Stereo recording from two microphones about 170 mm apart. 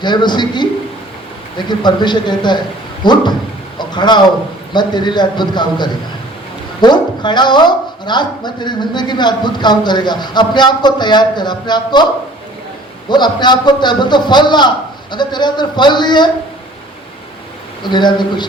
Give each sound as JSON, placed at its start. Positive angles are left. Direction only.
{"t": 0.0, "sound": "a man's voice", "side_deg": 25}
{"t": 13.1, "sound": "speech", "side_deg": 25}
{"t": 17.8, "sound": "speech", "side_deg": 25}